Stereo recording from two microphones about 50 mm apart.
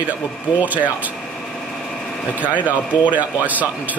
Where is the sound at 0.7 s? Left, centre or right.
Right.